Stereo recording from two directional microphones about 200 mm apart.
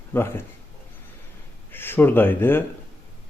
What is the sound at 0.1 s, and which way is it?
Speech, 10° left (ahead or behind).